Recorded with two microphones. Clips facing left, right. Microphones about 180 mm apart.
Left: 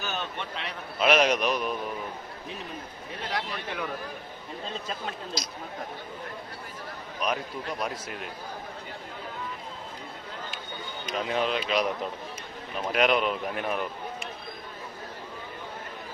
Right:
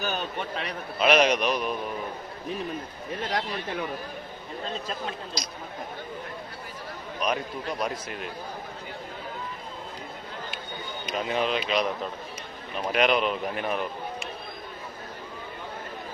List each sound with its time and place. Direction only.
0.0 s a man's voice: 40° right (ahead or behind)
0.9 s speech: centre (ahead or behind)
4.9 s speech: centre (ahead or behind)
7.2 s speech: 5° left (ahead or behind)
11.1 s speech: centre (ahead or behind)
12.9 s speech: centre (ahead or behind)